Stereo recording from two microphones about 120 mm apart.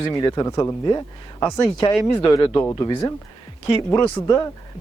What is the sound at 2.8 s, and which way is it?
Speech, 40° left (ahead or behind).